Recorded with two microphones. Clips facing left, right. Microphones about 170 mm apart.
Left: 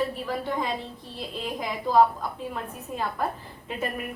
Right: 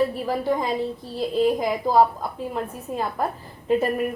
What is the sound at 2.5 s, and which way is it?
Speech, 35° right (ahead or behind).